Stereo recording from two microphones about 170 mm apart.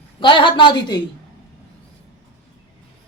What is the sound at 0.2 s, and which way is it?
Speech, 30° left (ahead or behind).